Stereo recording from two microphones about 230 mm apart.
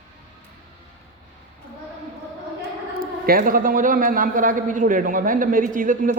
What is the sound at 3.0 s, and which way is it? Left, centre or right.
A man's voice, right.